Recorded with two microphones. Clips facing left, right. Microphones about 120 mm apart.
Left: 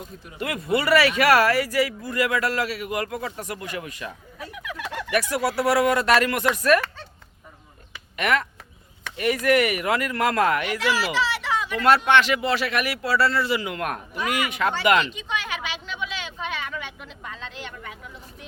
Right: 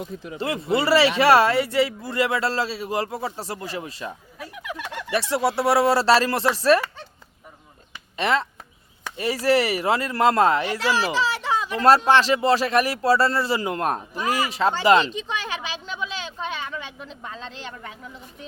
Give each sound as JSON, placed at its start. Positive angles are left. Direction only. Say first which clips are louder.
{"t": 0.3, "sound": "speech", "louder": "right 1 dB", "side_deg": -30}
{"t": 8.1, "sound": "speech", "louder": "right 1 dB", "side_deg": -25}